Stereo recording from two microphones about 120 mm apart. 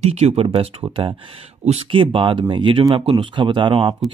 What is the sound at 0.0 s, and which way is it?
Speech, 55° right (ahead or behind).